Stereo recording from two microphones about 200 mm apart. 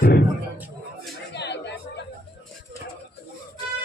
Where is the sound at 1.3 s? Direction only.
60° left (ahead or behind).